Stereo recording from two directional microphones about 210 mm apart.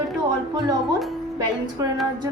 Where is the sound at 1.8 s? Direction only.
20° right (ahead or behind).